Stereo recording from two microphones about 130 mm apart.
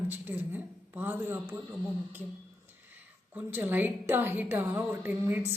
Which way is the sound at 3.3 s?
15° right (ahead or behind).